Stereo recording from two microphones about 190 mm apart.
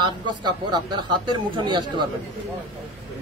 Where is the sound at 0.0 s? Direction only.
25° right (ahead or behind).